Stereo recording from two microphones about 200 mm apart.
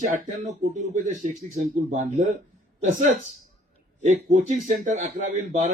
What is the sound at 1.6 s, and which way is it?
Speech, 35° right (ahead or behind).